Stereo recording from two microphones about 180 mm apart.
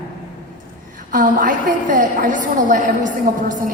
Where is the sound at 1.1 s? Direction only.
50° right (ahead or behind).